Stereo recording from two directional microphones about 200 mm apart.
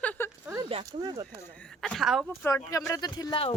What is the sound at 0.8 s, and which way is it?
Speech, 20° right (ahead or behind).